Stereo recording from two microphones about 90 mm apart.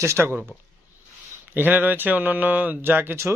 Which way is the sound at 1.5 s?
20° right (ahead or behind).